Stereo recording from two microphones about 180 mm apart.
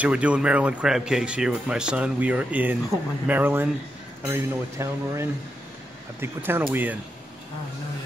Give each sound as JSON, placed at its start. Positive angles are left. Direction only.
{"t": 0.0, "sound": "speech", "side_deg": -5}